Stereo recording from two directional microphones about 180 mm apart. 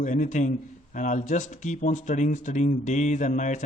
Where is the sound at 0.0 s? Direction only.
45° left (ahead or behind).